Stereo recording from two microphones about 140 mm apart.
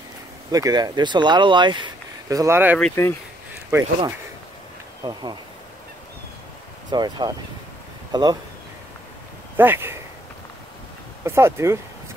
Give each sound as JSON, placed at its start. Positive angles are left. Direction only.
{"t": 0.5, "sound": "speech", "side_deg": -25}
{"t": 2.2, "sound": "speech", "side_deg": -20}
{"t": 5.0, "sound": "speech", "side_deg": -30}
{"t": 6.9, "sound": "speech", "side_deg": -30}
{"t": 9.6, "sound": "speech", "side_deg": -15}
{"t": 11.2, "sound": "speech", "side_deg": -20}